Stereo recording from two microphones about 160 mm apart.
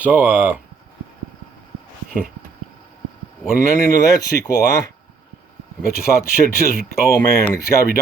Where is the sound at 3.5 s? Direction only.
70° left (ahead or behind).